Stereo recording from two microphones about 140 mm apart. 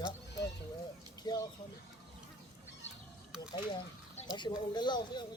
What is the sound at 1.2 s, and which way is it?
Speech, 30° left (ahead or behind).